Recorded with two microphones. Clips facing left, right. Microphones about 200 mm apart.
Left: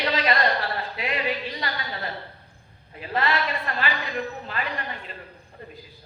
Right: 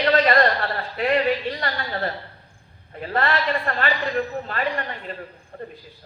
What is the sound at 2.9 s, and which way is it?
Speech, 50° right (ahead or behind).